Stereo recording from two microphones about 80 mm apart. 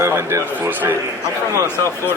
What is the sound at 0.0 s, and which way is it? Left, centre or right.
Speech, right.